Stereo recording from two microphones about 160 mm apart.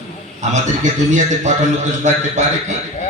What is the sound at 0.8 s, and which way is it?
Speech, 50° right (ahead or behind).